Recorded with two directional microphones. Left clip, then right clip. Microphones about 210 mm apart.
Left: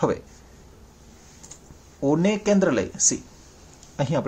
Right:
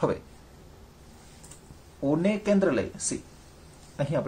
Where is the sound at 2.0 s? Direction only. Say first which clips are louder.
Left 4 dB; 40° left (ahead or behind).